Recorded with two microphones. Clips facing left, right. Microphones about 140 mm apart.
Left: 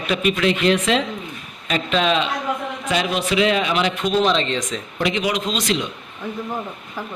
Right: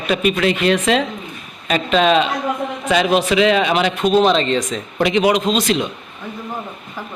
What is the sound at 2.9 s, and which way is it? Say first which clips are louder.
Speech: right 6 dB; 90° right.